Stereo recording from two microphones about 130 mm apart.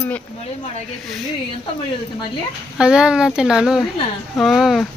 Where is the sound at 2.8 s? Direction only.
5° right (ahead or behind).